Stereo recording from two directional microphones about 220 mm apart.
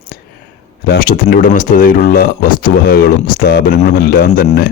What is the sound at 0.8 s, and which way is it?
Speech, 45° left (ahead or behind).